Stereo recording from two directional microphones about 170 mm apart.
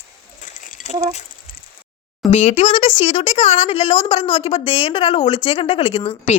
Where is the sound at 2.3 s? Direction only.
40° left (ahead or behind).